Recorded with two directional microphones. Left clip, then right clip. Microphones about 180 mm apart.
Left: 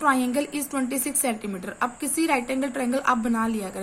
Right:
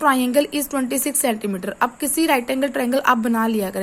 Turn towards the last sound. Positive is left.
turn(degrees=-45)  # may be behind; listen again after turning